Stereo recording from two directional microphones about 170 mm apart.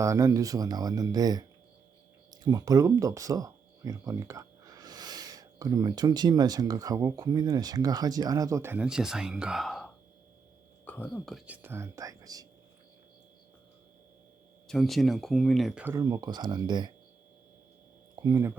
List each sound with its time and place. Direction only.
0.0 s speech: 20° right (ahead or behind); by 11.4 s 5° left (ahead or behind)
11.4 s speech: 10° right (ahead or behind)
14.7 s speech: centre (ahead or behind)
15.8 s speech: 15° right (ahead or behind)
18.2 s speech: 20° right (ahead or behind)